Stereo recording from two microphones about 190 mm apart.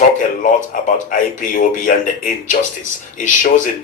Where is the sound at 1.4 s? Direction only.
45° left (ahead or behind).